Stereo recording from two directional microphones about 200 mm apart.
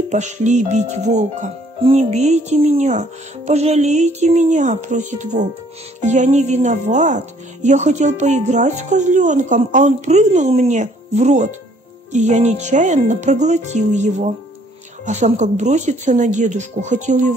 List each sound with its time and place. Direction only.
0.1 s speech: 35° right (ahead or behind)